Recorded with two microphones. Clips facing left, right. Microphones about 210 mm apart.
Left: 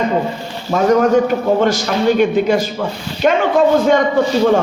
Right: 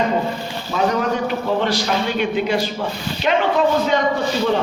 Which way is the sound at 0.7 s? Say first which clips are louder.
Left 8 dB; 45° left (ahead or behind).